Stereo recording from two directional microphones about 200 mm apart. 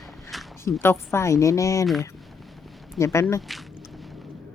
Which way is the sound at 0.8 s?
10° left (ahead or behind).